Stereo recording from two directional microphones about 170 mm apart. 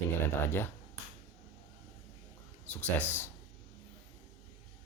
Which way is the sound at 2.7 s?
5° left (ahead or behind).